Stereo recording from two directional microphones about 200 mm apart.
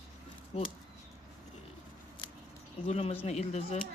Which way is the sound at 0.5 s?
30° left (ahead or behind).